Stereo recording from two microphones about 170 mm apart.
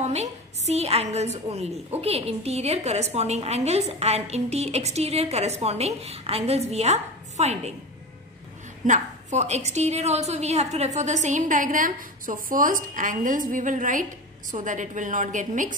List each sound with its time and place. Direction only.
0.0 s a woman's voice: 40° right (ahead or behind)
8.8 s a woman's voice: 45° right (ahead or behind)